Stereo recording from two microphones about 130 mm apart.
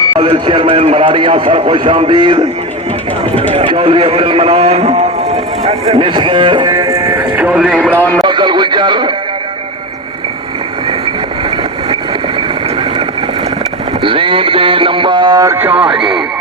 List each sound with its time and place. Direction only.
0.2 s a man's voice: 40° right (ahead or behind)
3.5 s a man's voice: 45° right (ahead or behind); by 7.3 s 30° right (ahead or behind)
7.3 s a sound: 10° right (ahead or behind)
7.9 s speech: 15° left (ahead or behind)
8.2 s radio: 35° right (ahead or behind)
12.4 s vehicle: 40° right (ahead or behind)
14.0 s a man's voice: 40° right (ahead or behind); by 15.7 s 20° right (ahead or behind)
15.7 s a man's voice: 40° right (ahead or behind)